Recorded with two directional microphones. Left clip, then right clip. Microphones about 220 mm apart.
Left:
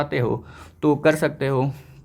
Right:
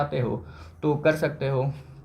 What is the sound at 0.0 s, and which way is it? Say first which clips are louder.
Speech: left 4 dB; 45° left (ahead or behind).